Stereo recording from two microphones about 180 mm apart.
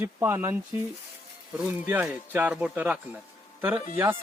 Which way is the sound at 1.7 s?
10° right (ahead or behind).